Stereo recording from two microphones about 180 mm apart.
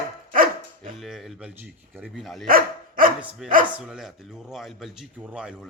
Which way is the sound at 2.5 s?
50° right (ahead or behind).